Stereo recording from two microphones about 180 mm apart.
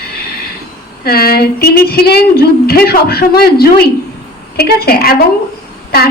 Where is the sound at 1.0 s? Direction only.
60° left (ahead or behind).